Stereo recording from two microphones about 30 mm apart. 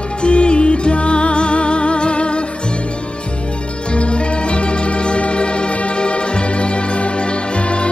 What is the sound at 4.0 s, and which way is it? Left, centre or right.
Organ, left.